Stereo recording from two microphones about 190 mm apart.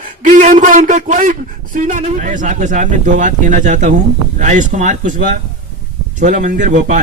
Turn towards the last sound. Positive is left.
turn(degrees=-40)  # may be behind; listen again after turning